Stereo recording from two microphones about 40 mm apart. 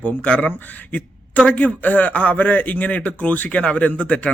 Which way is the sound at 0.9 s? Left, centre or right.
Left.